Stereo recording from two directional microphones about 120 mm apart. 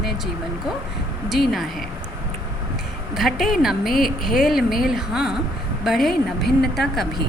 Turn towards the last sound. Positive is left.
turn(degrees=0)  # may be behind; listen again after turning